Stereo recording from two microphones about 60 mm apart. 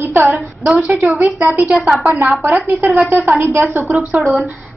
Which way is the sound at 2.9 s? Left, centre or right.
Right.